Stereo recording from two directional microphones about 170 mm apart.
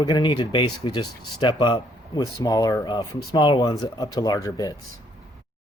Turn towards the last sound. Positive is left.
turn(degrees=20)  # may be behind; listen again after turning